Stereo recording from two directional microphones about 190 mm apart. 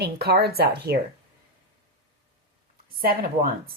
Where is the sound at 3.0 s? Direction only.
50° right (ahead or behind).